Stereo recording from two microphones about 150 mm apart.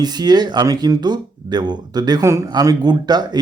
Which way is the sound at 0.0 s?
25° right (ahead or behind).